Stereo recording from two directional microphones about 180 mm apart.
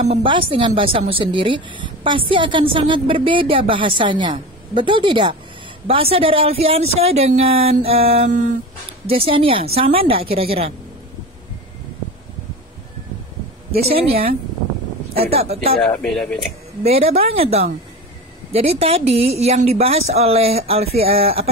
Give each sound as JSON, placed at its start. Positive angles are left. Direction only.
{"t": 0.0, "sound": "a woman's voice", "side_deg": -35}
{"t": 9.0, "sound": "a woman's voice", "side_deg": -30}
{"t": 15.3, "sound": "a woman's voice", "side_deg": -35}
{"t": 15.8, "sound": "speech", "side_deg": 5}
{"t": 16.8, "sound": "a woman's voice", "side_deg": -35}